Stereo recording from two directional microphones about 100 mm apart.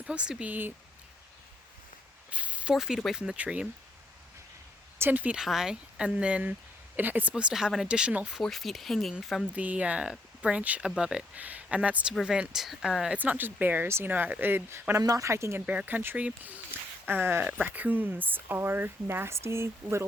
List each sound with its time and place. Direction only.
0.0 s speech: 10° right (ahead or behind)
2.3 s speech: 10° right (ahead or behind)
4.9 s speech: 20° right (ahead or behind); by 9.5 s centre (ahead or behind)
9.5 s speech: 15° right (ahead or behind)
15.6 s speech: 15° right (ahead or behind)